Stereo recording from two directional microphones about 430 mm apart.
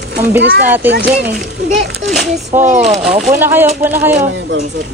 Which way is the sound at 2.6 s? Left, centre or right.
Centre.